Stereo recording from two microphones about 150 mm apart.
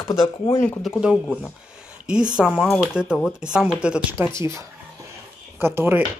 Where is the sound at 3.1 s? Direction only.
15° left (ahead or behind).